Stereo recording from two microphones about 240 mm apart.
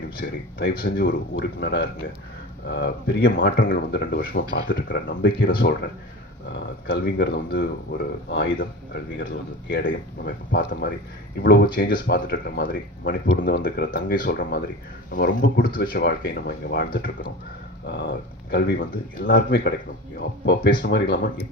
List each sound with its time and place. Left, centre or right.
0.6 s speech: left
20.8 s speech: left